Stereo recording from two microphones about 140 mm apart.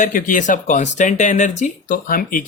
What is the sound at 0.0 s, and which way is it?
Speech, 70° left (ahead or behind).